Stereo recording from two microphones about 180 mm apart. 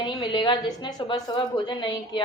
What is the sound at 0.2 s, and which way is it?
A woman's voice, 25° left (ahead or behind).